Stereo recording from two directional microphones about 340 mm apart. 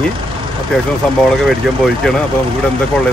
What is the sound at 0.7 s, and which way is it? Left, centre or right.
Speech, centre.